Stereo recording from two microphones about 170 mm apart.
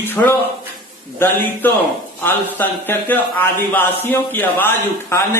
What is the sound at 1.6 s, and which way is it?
A man's voice, 10° left (ahead or behind).